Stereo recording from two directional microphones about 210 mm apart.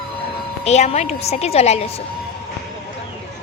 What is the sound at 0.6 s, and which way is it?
A woman's voice, 30° left (ahead or behind).